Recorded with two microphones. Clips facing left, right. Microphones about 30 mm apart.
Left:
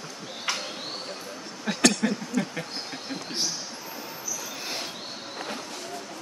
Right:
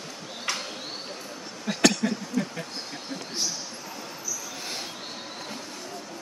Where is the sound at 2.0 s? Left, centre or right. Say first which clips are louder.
Left 1 dB; left.